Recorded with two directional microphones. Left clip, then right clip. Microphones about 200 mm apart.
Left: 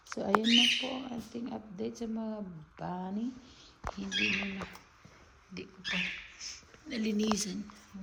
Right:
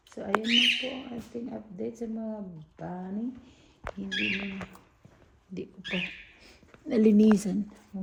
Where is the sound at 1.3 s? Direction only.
65° left (ahead or behind).